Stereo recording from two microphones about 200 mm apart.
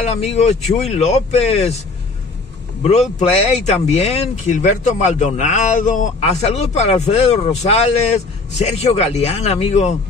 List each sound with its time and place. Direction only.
0.0 s speech: 30° left (ahead or behind)
2.8 s speech: 35° left (ahead or behind)